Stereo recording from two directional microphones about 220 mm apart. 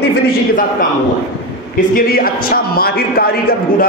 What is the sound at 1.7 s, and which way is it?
A man's voice, 40° left (ahead or behind).